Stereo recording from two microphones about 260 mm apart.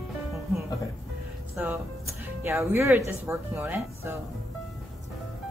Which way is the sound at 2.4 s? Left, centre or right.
Centre.